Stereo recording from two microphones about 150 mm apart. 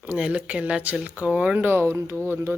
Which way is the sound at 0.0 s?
10° right (ahead or behind).